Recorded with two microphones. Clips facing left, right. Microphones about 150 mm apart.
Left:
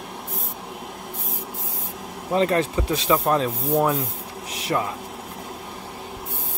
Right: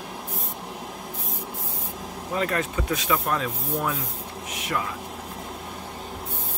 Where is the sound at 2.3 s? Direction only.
30° left (ahead or behind).